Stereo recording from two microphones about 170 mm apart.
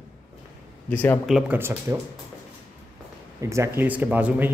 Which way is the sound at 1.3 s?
5° right (ahead or behind).